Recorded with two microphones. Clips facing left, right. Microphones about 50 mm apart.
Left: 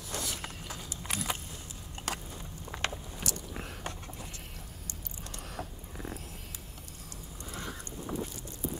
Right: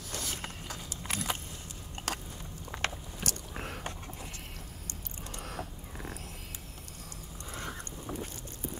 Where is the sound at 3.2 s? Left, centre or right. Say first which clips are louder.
Right 2 dB; right.